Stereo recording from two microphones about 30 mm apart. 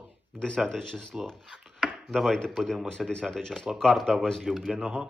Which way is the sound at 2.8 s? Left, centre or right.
Left.